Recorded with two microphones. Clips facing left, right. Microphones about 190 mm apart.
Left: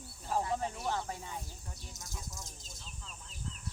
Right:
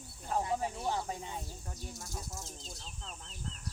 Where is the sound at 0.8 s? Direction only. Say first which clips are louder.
Right 1 dB; 20° right (ahead or behind).